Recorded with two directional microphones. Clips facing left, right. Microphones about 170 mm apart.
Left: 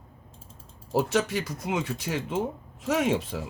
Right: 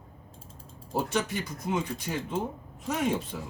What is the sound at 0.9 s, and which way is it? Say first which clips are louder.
Speech: left 4 dB; 90° left.